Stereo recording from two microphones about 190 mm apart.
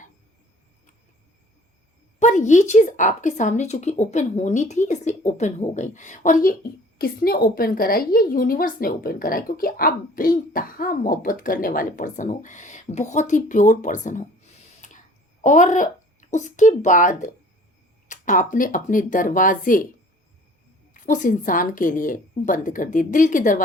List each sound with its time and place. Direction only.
2.1 s a woman's voice: 40° left (ahead or behind)
14.8 s a sound: 40° left (ahead or behind)
15.4 s a woman's voice: 40° left (ahead or behind)
20.9 s a woman's voice: 45° left (ahead or behind)